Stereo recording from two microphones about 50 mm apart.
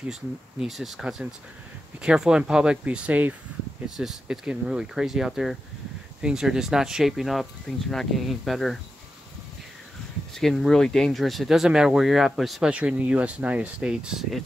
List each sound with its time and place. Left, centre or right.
0.1 s speech: centre
1.0 s speech: centre; by 3.3 s right
3.8 s speech: centre
10.3 s speech: centre
12.6 s speech: right
13.7 s speech: right